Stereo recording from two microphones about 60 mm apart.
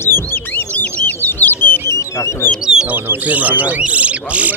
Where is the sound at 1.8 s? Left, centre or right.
Left.